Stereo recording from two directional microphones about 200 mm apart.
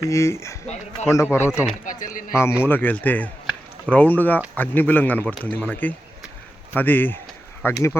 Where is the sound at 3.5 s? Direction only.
5° left (ahead or behind).